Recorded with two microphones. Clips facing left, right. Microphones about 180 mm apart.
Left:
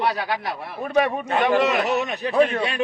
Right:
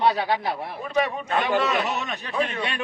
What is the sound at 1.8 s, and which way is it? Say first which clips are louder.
Speech: left 6 dB; 40° left (ahead or behind).